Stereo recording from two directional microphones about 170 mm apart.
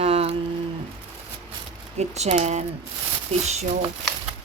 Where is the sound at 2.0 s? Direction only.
40° right (ahead or behind).